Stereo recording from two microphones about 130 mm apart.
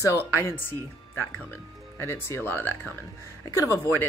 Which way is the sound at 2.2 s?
20° left (ahead or behind).